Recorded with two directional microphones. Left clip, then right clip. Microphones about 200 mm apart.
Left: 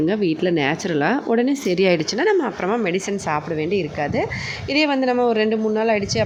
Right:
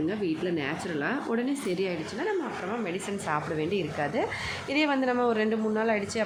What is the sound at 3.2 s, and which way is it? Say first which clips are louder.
A woman's voice: left 7 dB; 20° left (ahead or behind).